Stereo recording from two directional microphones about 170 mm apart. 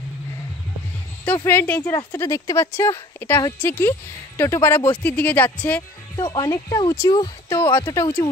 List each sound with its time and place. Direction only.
1.4 s a woman's voice: 15° left (ahead or behind)
6.1 s speech: 25° left (ahead or behind)
7.7 s a woman's voice: 15° left (ahead or behind)